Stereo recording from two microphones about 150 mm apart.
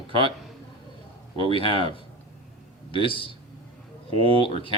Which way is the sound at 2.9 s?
35° left (ahead or behind).